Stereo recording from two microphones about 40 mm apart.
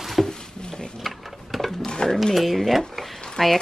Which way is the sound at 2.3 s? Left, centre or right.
Centre.